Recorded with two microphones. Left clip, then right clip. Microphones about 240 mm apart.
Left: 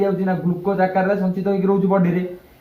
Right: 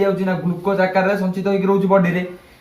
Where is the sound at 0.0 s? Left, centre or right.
Right.